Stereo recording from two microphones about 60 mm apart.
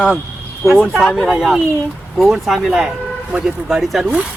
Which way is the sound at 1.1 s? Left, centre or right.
Centre.